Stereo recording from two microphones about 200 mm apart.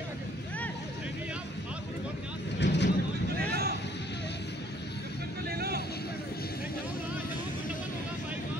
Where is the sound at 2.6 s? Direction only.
60° left (ahead or behind).